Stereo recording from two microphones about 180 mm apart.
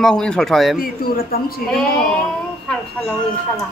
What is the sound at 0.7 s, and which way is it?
Speech, 55° left (ahead or behind).